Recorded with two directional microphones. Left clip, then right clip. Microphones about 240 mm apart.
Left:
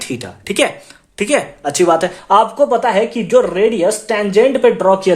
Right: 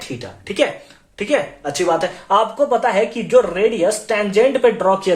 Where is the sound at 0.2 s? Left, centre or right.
Left.